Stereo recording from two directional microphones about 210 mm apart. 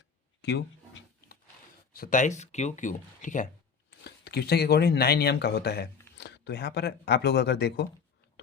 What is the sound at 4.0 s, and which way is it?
Speech, 50° left (ahead or behind).